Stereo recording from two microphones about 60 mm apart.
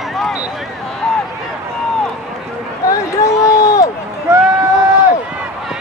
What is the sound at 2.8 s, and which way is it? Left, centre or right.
Run, left.